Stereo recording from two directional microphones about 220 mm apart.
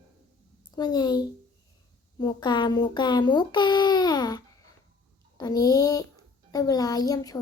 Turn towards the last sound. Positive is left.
turn(degrees=15)  # may be behind; listen again after turning